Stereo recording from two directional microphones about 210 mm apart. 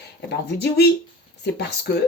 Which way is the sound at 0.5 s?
50° left (ahead or behind).